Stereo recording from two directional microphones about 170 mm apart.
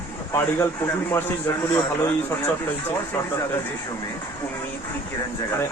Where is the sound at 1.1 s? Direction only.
15° left (ahead or behind).